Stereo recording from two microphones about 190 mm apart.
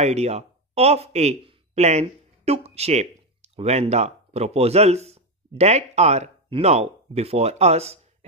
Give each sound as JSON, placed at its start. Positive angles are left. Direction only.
{"t": 0.0, "sound": "speech", "side_deg": -35}